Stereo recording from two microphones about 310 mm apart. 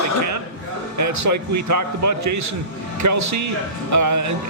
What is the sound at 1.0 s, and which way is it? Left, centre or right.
A man's voice, right.